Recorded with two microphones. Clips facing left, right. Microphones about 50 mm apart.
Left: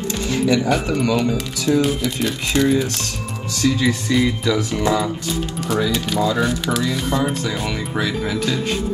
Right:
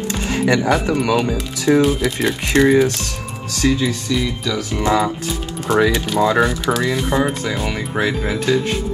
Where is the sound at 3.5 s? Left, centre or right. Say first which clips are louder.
Right 1 dB; right.